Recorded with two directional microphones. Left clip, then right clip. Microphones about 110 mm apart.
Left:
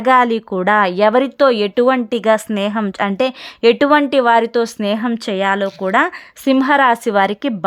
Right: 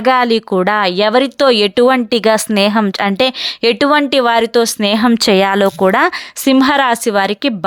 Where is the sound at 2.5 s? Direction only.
45° right (ahead or behind).